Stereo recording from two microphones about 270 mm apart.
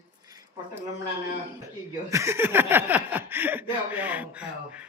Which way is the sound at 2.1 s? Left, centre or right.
Centre.